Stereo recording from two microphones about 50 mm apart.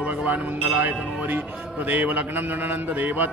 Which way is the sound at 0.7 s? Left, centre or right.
Right.